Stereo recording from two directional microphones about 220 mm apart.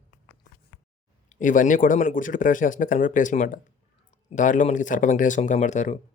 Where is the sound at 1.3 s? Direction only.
35° left (ahead or behind).